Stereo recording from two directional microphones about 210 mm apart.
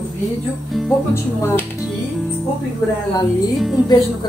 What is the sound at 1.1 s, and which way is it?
Speech, 15° left (ahead or behind).